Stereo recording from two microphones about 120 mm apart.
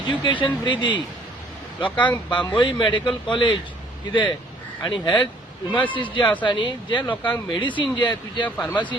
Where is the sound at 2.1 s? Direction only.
40° left (ahead or behind).